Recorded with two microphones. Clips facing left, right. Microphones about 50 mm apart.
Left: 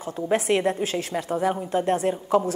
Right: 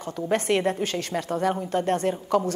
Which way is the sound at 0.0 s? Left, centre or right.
Centre.